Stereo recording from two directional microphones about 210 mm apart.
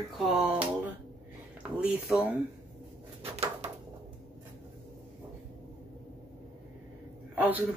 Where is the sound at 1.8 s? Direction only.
5° right (ahead or behind).